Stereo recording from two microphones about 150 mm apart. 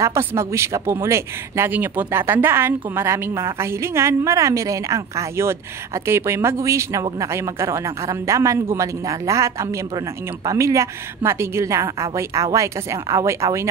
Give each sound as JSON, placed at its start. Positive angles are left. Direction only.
{"t": 0.0, "sound": "speech", "side_deg": -15}